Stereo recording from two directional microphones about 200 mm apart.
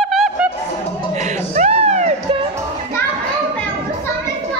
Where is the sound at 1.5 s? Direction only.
35° right (ahead or behind).